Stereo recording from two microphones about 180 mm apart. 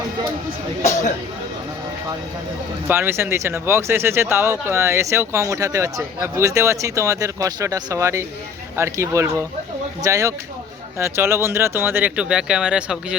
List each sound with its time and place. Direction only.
2.8 s speech: 10° right (ahead or behind)